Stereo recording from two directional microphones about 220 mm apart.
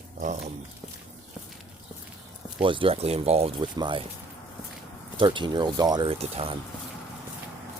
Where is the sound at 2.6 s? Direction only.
25° right (ahead or behind).